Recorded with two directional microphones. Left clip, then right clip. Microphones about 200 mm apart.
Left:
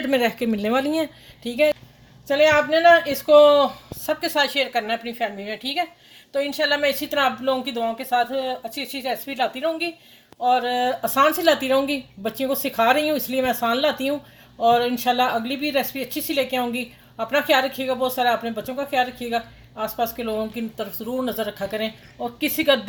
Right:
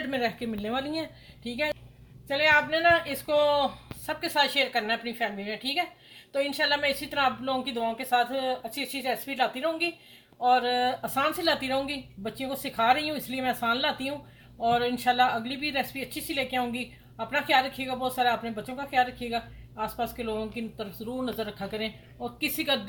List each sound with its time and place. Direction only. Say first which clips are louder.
0.1 s a woman's voice: left 11 dB; 50° left (ahead or behind)